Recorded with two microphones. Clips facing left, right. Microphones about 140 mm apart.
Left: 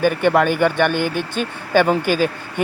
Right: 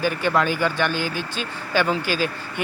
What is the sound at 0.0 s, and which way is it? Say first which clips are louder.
Speech: left 6 dB; 60° left (ahead or behind).